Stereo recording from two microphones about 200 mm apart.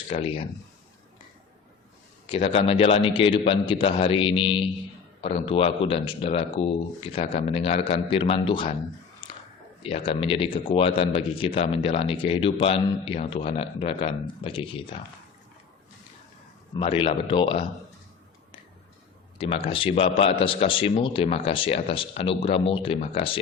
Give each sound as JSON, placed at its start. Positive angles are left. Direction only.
{"t": 0.1, "sound": "a man's voice", "side_deg": 30}
{"t": 2.2, "sound": "a man's voice", "side_deg": 25}
{"t": 9.2, "sound": "a sound", "side_deg": 20}
{"t": 9.8, "sound": "a man's voice", "side_deg": 30}
{"t": 16.8, "sound": "a man's voice", "side_deg": 25}
{"t": 19.4, "sound": "a man's voice", "side_deg": 25}